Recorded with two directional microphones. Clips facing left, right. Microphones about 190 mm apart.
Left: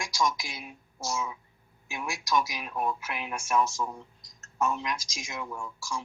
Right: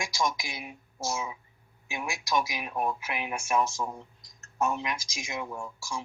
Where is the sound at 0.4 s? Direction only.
15° right (ahead or behind).